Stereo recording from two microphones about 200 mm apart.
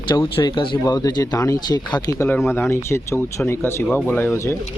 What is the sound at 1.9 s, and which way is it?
Speech, 10° left (ahead or behind).